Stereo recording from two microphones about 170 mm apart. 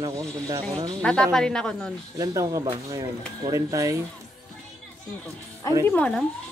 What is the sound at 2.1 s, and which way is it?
Speech, 20° right (ahead or behind).